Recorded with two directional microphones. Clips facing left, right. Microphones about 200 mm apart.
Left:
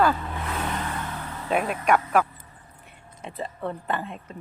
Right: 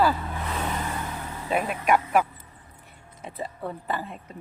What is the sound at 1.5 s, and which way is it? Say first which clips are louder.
Speech: left 1 dB; centre (ahead or behind).